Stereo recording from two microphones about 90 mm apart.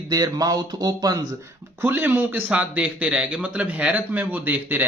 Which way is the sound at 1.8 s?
25° right (ahead or behind).